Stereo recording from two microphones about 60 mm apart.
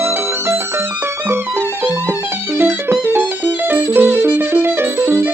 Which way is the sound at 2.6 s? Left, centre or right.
Right.